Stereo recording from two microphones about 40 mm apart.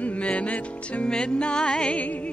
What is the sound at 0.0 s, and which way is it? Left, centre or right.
Music, left.